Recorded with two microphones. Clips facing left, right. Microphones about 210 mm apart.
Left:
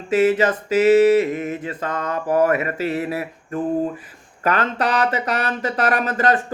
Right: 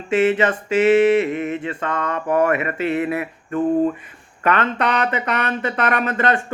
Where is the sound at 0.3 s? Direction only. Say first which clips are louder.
Even; 40° left (ahead or behind).